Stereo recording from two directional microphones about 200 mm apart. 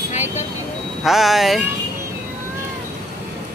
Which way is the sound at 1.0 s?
Centre (ahead or behind).